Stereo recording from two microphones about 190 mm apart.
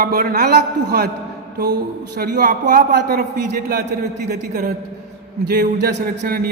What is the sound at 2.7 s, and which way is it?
Speech, 60° right (ahead or behind).